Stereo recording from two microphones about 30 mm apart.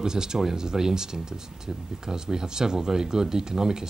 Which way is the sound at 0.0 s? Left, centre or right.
Right.